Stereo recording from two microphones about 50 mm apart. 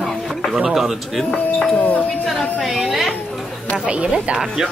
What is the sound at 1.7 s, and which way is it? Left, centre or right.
Speech, left.